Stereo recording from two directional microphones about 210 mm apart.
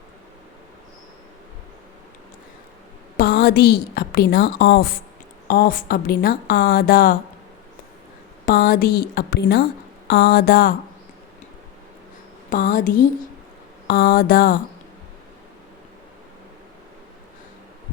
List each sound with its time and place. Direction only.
3.2 s a woman's voice: 45° left (ahead or behind)
8.4 s a woman's voice: 45° left (ahead or behind)
12.5 s a sound: 40° left (ahead or behind)
13.8 s a woman's voice: 45° left (ahead or behind)